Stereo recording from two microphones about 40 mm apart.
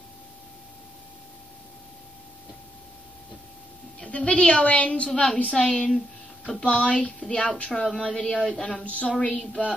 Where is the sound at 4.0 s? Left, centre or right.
Left.